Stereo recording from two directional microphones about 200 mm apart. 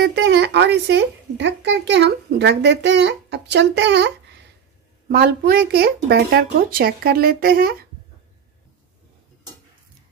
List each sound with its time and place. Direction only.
0.0 s a child's voice: 60° right (ahead or behind)